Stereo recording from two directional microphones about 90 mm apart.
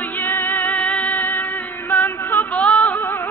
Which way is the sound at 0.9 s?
20° left (ahead or behind).